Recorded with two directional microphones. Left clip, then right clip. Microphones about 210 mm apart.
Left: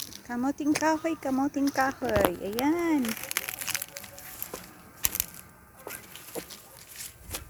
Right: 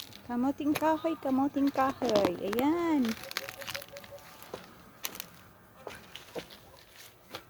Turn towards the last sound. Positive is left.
turn(degrees=55)  # may be behind; listen again after turning